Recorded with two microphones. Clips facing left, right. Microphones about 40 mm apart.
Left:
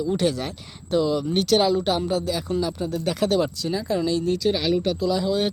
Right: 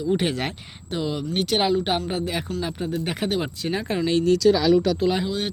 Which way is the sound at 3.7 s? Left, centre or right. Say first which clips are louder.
Even; right.